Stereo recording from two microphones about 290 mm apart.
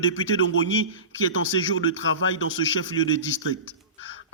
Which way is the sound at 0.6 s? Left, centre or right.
Left.